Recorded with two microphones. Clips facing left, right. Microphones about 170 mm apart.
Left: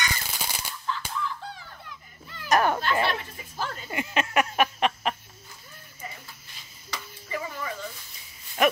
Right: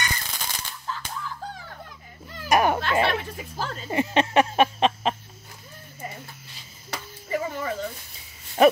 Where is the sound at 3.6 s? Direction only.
30° right (ahead or behind).